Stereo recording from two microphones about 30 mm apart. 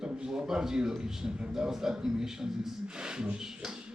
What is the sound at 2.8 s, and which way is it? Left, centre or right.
Speech, right.